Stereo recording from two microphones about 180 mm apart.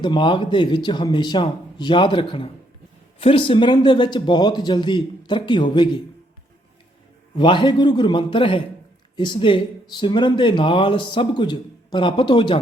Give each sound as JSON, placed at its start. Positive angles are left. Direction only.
{"t": 0.0, "sound": "speech", "side_deg": 25}
{"t": 7.3, "sound": "speech", "side_deg": 25}